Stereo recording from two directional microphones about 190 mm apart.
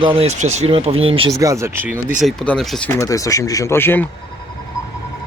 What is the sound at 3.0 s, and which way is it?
Speech, 15° left (ahead or behind).